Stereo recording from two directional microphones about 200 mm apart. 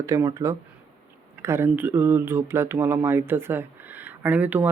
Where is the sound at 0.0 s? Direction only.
15° right (ahead or behind).